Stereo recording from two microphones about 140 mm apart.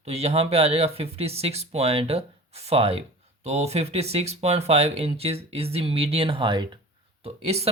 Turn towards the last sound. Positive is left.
turn(degrees=-50)  # may be behind; listen again after turning